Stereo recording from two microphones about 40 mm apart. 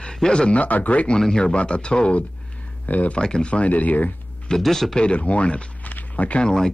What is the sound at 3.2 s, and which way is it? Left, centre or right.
Snicker, left.